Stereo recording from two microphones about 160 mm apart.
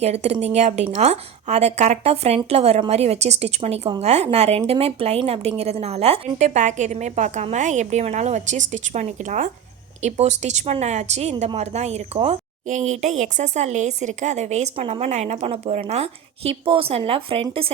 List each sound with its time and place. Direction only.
0.0 s a woman's voice: 40° right (ahead or behind)